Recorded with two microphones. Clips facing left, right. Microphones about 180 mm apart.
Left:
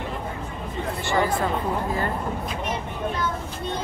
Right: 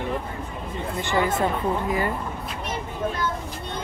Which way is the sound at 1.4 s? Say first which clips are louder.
Right 1 dB; 15° right (ahead or behind).